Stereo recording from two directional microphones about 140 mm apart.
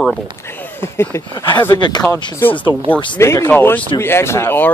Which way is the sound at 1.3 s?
35° left (ahead or behind).